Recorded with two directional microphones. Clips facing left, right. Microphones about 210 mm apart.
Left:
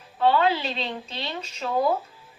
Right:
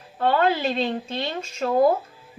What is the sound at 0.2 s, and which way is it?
A woman's voice, 50° right (ahead or behind).